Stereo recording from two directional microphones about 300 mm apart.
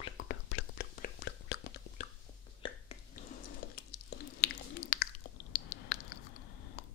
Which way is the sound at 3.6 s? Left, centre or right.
Left.